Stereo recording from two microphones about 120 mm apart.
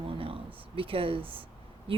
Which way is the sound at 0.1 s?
50° right (ahead or behind).